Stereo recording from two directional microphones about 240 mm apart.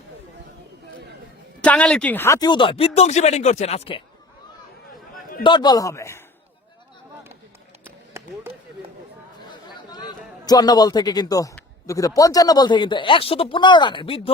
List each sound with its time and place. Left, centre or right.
1.6 s speech: centre; by 4.0 s left
5.4 s a man's voice: centre
9.5 s a man's voice: centre